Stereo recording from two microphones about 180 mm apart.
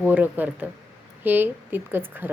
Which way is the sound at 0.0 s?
10° right (ahead or behind).